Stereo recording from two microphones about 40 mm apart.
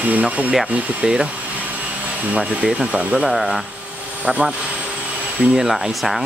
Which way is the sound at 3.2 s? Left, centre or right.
Centre.